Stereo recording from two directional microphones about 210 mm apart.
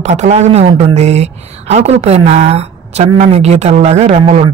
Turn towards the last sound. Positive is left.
turn(degrees=-35)  # may be behind; listen again after turning